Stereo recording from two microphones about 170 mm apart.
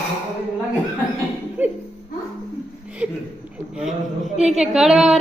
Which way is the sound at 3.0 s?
10° right (ahead or behind).